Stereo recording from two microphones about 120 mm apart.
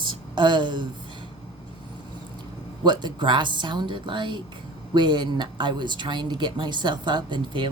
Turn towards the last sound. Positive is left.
turn(degrees=-40)  # may be behind; listen again after turning